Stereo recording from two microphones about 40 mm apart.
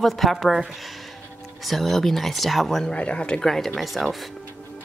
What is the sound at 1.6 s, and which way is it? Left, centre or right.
Speech, centre.